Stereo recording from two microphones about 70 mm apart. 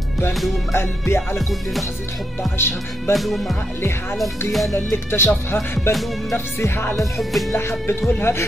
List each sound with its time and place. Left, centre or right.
0.7 s music: left
3.1 s music: centre
4.7 s music: left
7.0 s music: centre
7.5 s music: left